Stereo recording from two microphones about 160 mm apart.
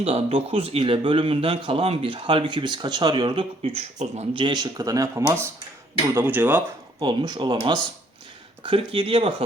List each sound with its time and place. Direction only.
0.0 s speech: 35° right (ahead or behind)
3.8 s speech: 45° right (ahead or behind)
4.4 s speech: 25° right (ahead or behind)
7.0 s speech: 30° right (ahead or behind)